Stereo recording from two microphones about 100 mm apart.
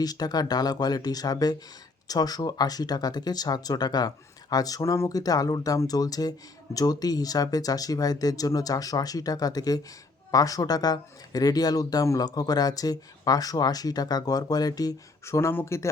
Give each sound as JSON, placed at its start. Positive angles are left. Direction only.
{"t": 0.0, "sound": "speech", "side_deg": 40}